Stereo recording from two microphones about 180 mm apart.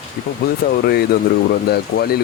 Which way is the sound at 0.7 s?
65° left (ahead or behind).